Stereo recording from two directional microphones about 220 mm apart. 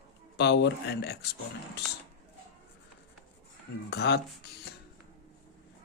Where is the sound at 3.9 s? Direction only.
50° left (ahead or behind).